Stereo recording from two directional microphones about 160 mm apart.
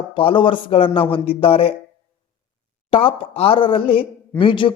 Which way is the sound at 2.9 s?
35° left (ahead or behind).